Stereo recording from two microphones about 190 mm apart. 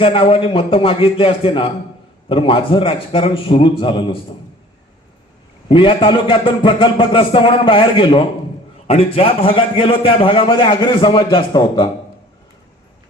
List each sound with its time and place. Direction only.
0.0 s a man's voice: 30° left (ahead or behind)
5.6 s a man's voice: 25° left (ahead or behind)